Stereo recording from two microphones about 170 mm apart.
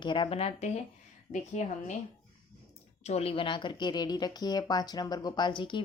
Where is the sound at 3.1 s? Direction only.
35° left (ahead or behind).